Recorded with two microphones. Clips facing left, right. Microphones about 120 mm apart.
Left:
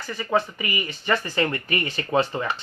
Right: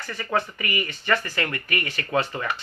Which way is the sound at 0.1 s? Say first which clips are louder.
Left 3 dB; 15° left (ahead or behind).